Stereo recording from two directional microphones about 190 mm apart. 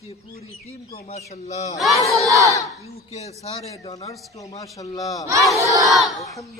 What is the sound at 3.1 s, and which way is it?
A man's voice, 35° left (ahead or behind).